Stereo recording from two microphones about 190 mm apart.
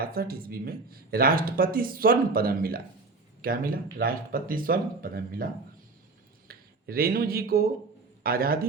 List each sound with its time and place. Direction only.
0.0 s speech: 50° right (ahead or behind)
6.5 s speech: 50° right (ahead or behind)